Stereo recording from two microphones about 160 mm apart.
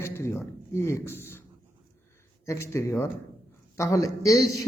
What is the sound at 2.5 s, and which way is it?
A man's voice, 15° left (ahead or behind).